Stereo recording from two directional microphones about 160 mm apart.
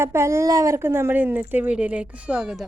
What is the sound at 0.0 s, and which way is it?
Speech, 15° right (ahead or behind).